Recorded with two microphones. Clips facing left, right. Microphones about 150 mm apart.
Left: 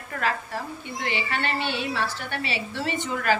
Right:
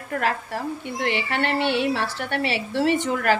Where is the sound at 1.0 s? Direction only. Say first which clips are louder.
Right 4 dB; 65° right (ahead or behind).